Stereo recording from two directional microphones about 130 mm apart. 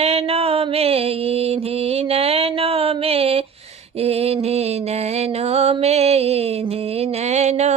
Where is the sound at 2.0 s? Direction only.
50° right (ahead or behind).